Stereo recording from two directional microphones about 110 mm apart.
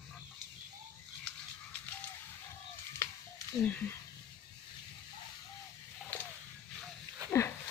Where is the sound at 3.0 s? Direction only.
25° left (ahead or behind).